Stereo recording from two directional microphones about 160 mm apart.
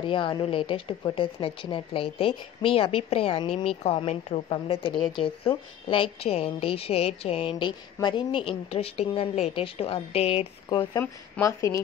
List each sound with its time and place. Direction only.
0.0 s a woman's voice: 30° left (ahead or behind)
10.7 s speech: 25° left (ahead or behind)